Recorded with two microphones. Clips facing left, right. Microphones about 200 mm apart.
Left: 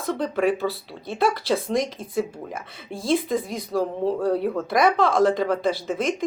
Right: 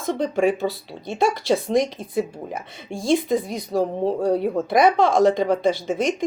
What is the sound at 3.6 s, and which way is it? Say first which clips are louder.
Speech: right 2 dB; 25° right (ahead or behind).